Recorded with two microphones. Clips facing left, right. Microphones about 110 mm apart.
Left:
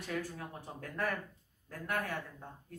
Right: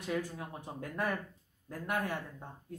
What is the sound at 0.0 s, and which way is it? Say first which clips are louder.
Speech: right 3 dB; 15° right (ahead or behind).